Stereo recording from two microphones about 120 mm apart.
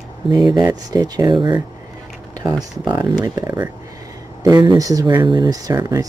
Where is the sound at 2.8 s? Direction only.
35° right (ahead or behind).